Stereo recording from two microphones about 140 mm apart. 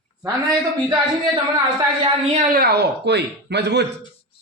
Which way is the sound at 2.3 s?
90° right.